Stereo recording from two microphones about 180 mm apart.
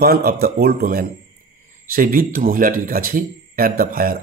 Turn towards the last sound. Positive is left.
turn(degrees=-50)  # may be behind; listen again after turning